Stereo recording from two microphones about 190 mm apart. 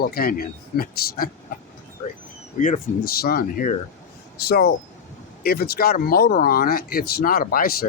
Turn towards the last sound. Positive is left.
turn(degrees=50)  # may be behind; listen again after turning